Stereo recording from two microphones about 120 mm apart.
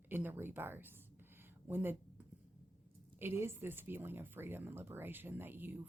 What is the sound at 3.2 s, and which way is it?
Speech, 20° right (ahead or behind).